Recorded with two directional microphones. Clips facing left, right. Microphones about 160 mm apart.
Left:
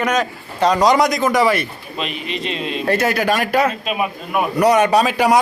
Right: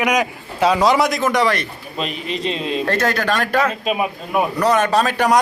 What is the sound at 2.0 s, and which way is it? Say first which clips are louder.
Speech: right 2 dB; 40° right (ahead or behind).